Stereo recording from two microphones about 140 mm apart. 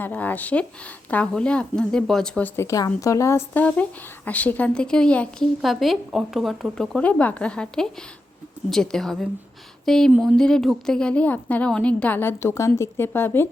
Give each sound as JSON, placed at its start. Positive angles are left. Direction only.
{"t": 0.0, "sound": "a woman's voice", "side_deg": 10}
{"t": 2.6, "sound": "a woman's voice", "side_deg": 25}